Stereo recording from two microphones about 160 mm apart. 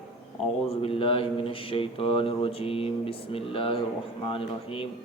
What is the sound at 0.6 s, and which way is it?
A man's voice, 40° left (ahead or behind).